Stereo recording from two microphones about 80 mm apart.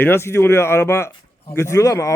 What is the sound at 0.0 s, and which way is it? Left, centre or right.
Speech, left.